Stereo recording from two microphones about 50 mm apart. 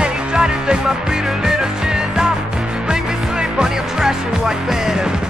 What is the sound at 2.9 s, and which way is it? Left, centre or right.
Music, centre.